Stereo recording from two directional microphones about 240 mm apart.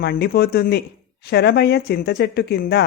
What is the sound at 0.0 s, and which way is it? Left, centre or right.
A woman's voice, left.